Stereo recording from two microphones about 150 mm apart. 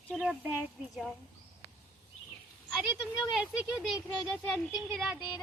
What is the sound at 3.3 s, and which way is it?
A woman's voice, centre (ahead or behind).